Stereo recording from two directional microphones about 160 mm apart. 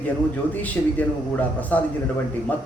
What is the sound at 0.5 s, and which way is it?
Music, 10° left (ahead or behind).